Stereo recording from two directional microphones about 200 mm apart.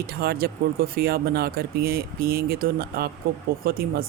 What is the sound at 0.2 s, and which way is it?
Speech, 50° right (ahead or behind).